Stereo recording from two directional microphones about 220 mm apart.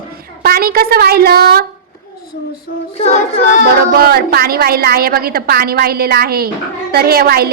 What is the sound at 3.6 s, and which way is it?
A woman's voice, 45° right (ahead or behind).